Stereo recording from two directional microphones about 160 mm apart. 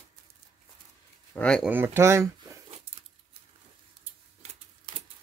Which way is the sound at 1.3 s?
5° left (ahead or behind).